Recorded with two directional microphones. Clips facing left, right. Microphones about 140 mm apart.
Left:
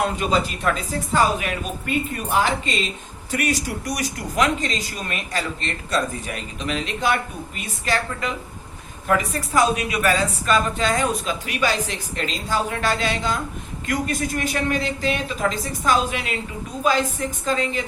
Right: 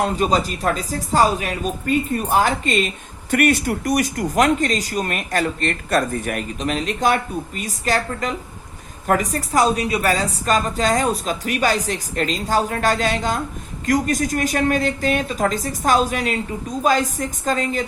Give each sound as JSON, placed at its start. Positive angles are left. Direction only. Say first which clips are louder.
{"t": 0.0, "sound": "a woman's voice", "louder": "right 3 dB", "side_deg": -40}